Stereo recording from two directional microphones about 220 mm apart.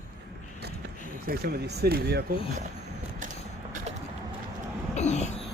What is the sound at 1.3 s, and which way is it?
Speech, 45° right (ahead or behind).